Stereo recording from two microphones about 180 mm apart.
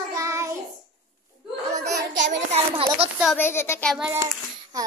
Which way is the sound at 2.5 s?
30° right (ahead or behind).